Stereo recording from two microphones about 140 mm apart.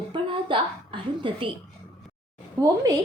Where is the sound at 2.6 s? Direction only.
25° right (ahead or behind).